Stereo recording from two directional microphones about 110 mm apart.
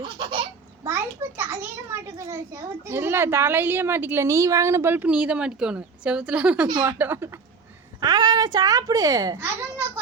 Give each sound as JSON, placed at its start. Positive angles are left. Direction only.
{"t": 0.0, "sound": "babbling", "side_deg": -50}
{"t": 0.9, "sound": "a child's voice", "side_deg": -25}
{"t": 8.0, "sound": "speech", "side_deg": -35}
{"t": 9.4, "sound": "a child's voice", "side_deg": -20}